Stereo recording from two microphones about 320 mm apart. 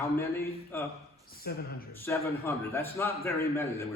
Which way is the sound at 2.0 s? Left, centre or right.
Centre.